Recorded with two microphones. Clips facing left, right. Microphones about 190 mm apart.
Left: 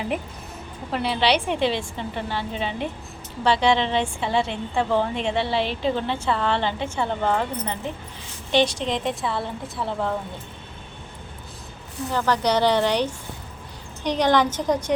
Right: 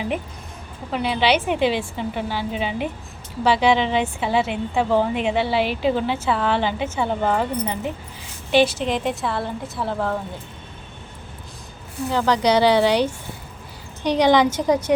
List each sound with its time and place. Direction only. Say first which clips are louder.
0.9 s a woman's voice: right 2 dB; centre (ahead or behind)
12.1 s a woman's voice: right 3 dB; 15° right (ahead or behind)